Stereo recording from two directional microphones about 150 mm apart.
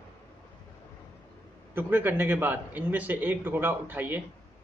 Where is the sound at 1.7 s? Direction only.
15° right (ahead or behind).